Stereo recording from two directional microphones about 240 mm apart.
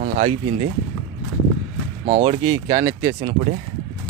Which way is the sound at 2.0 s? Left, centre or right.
Right.